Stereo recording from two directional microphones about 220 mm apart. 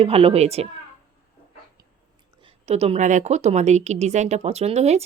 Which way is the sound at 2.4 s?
25° right (ahead or behind).